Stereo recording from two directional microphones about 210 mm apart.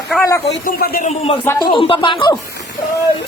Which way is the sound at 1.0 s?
30° left (ahead or behind).